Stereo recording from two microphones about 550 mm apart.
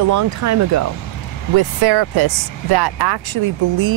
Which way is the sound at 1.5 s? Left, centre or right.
Right.